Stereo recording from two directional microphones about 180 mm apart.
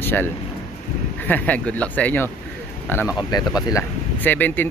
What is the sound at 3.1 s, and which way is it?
Speech, 20° left (ahead or behind).